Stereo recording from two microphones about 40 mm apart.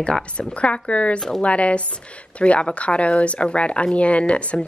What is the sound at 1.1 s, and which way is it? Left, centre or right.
Speech, centre.